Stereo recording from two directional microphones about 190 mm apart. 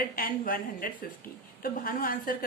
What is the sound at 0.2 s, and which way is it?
A woman's voice, 50° left (ahead or behind).